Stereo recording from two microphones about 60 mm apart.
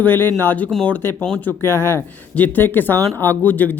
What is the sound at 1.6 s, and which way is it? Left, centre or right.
Speech, left.